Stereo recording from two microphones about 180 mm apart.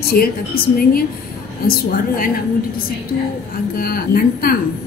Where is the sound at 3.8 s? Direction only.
55° left (ahead or behind).